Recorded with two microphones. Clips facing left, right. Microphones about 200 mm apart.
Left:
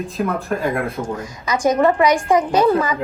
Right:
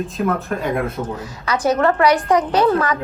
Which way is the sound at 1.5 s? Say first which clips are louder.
Left 1 dB; 10° left (ahead or behind).